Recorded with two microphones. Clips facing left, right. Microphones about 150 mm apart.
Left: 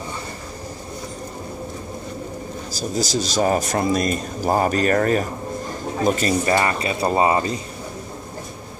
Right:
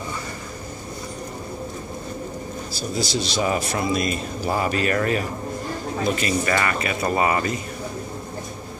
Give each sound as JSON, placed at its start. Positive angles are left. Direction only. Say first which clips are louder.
{"t": 2.7, "sound": "speech", "louder": "left 3 dB", "side_deg": 40}
{"t": 6.4, "sound": "speech", "louder": "left 3 dB", "side_deg": 25}